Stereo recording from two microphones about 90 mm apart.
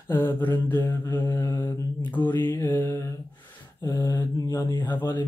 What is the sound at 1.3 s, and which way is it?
Mantra, 40° left (ahead or behind).